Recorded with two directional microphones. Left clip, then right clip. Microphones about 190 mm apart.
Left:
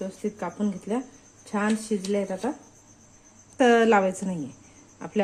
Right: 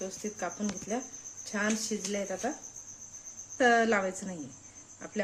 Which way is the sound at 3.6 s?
30° left (ahead or behind).